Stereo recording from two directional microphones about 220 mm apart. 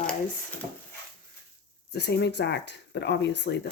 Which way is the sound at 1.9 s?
50° left (ahead or behind).